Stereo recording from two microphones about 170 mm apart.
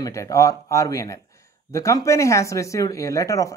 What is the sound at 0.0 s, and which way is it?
Speech, 20° left (ahead or behind).